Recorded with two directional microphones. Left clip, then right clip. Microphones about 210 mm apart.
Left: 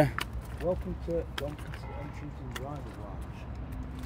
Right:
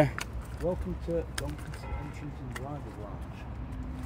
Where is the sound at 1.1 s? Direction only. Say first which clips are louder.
Even; 60° right (ahead or behind).